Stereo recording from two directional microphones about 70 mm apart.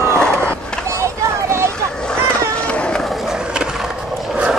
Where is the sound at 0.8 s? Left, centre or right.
Right.